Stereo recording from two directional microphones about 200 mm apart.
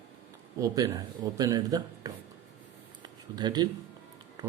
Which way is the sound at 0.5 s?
15° right (ahead or behind).